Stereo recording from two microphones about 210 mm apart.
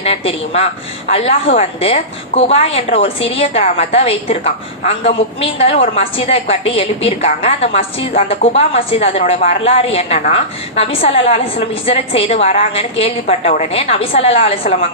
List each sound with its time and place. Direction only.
0.0 s a woman's voice: 30° left (ahead or behind)
14.6 s a woman's voice: 40° left (ahead or behind)